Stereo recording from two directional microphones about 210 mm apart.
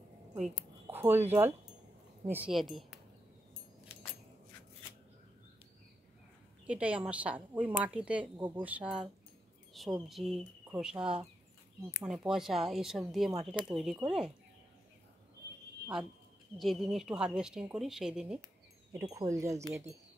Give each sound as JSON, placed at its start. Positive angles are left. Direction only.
{"t": 0.6, "sound": "speech", "side_deg": -10}
{"t": 6.7, "sound": "a woman's voice", "side_deg": -5}
{"t": 16.5, "sound": "speech", "side_deg": 0}
{"t": 19.1, "sound": "a woman's voice", "side_deg": -15}